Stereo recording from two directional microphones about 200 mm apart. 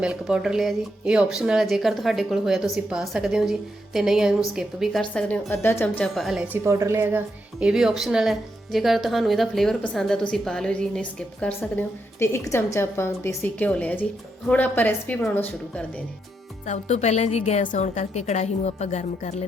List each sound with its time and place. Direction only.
0.0 s speech: 5° right (ahead or behind)
6.7 s a woman's voice: 15° right (ahead or behind); by 15.8 s 5° left (ahead or behind)
16.6 s a woman's voice: 35° left (ahead or behind)